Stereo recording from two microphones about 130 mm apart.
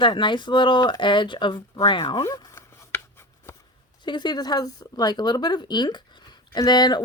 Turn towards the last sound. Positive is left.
turn(degrees=35)  # may be behind; listen again after turning